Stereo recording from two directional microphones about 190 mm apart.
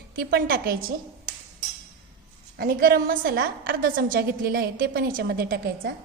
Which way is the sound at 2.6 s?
55° right (ahead or behind).